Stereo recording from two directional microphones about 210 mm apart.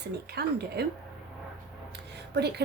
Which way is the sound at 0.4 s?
50° right (ahead or behind).